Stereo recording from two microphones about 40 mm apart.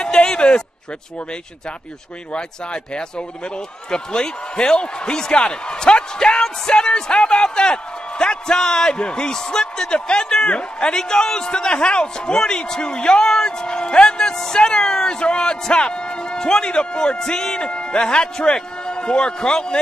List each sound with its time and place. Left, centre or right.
0.0 s a sound: left
2.3 s a man's voice: left
9.8 s a man's voice: left; by 15.0 s centre
15.0 s a man's voice: left